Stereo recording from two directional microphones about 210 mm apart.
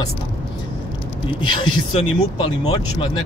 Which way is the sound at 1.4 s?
20° left (ahead or behind).